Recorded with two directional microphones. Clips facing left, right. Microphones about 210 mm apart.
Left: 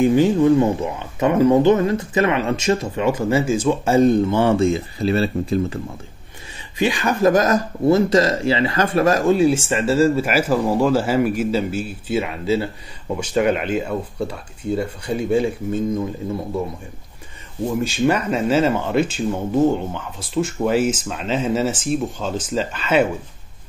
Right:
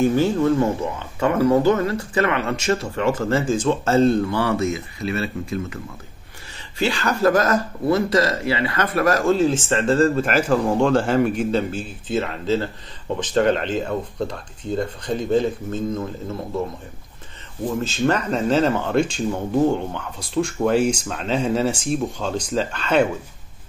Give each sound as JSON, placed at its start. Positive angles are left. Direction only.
{"t": 0.0, "sound": "speech", "side_deg": 15}
{"t": 6.8, "sound": "speech", "side_deg": 15}
{"t": 17.7, "sound": "speech", "side_deg": 10}